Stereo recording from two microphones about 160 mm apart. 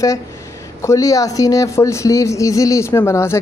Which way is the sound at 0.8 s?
20° left (ahead or behind).